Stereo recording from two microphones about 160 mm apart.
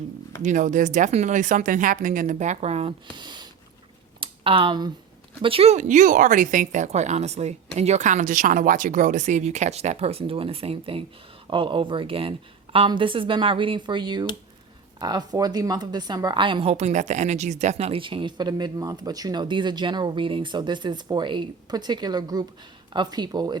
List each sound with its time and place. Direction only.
0.4 s a woman's voice: 50° right (ahead or behind)
3.2 s speech: 30° right (ahead or behind)
4.2 s a sound: 35° right (ahead or behind)
5.4 s a woman's voice: 35° right (ahead or behind)